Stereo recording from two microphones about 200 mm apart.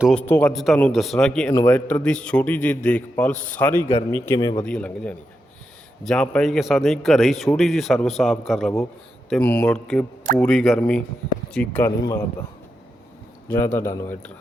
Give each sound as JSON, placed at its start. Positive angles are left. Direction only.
{"t": 0.0, "sound": "a man's voice", "side_deg": 5}
{"t": 4.6, "sound": "a man's voice", "side_deg": 5}
{"t": 13.7, "sound": "a man's voice", "side_deg": 15}